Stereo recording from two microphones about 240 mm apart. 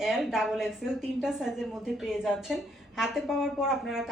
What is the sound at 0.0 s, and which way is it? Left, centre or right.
Speech, centre.